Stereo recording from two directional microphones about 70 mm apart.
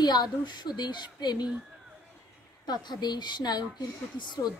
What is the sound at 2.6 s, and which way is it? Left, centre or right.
A woman's voice, left.